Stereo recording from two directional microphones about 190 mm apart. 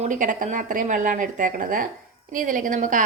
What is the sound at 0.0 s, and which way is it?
Speech, 45° right (ahead or behind).